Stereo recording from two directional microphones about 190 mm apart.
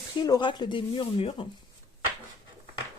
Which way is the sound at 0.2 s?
25° left (ahead or behind).